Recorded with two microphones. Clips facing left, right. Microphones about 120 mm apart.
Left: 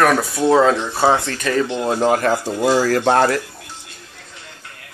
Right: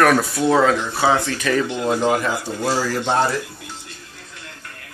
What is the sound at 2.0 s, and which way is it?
Speech, 45° left (ahead or behind).